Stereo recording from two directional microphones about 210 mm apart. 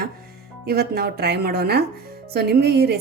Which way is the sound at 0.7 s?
50° right (ahead or behind).